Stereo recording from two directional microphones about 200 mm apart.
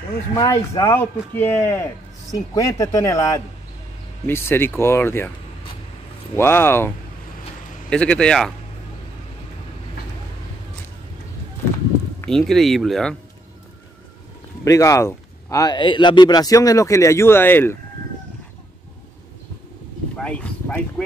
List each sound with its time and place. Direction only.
0.4 s a man's voice: 15° left (ahead or behind)
6.3 s a man's voice: 10° left (ahead or behind)
7.9 s speech: 5° left (ahead or behind)
12.2 s speech: centre (ahead or behind)
14.6 s a man's voice: 15° left (ahead or behind)
20.2 s a sound: 5° left (ahead or behind)